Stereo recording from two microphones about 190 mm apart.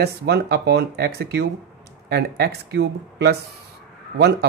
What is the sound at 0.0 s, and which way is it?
A man's voice, 60° right (ahead or behind).